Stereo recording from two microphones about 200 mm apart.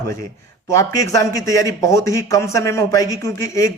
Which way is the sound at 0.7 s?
15° left (ahead or behind).